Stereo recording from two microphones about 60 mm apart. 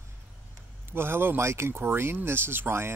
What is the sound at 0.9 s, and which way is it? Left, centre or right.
Speech, right.